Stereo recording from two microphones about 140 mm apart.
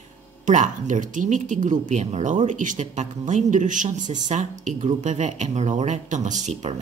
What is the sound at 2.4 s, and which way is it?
Speech, 65° right (ahead or behind).